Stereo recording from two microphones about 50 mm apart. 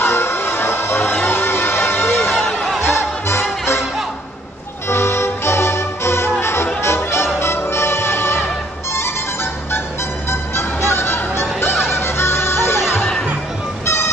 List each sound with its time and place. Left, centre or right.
0.0 s music: left
4.8 s music: left